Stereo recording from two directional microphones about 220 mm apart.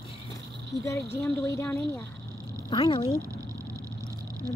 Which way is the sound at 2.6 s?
25° left (ahead or behind).